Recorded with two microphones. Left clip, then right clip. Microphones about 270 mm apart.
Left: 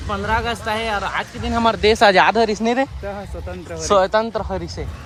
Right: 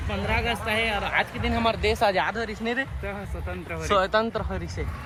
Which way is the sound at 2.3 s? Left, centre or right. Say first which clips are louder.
Left 12 dB; left.